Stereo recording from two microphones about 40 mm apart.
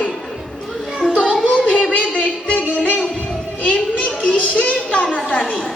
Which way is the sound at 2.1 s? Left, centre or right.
Left.